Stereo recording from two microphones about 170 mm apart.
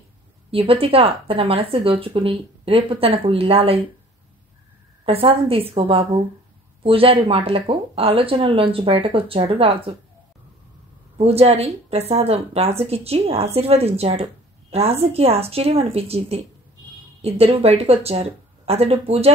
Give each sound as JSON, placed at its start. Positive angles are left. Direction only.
{"t": 0.5, "sound": "speech", "side_deg": -35}
{"t": 5.0, "sound": "speech", "side_deg": -35}
{"t": 11.1, "sound": "a woman's voice", "side_deg": -35}